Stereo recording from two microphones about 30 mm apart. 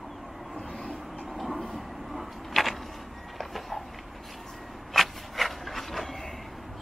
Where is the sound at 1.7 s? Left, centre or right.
Centre.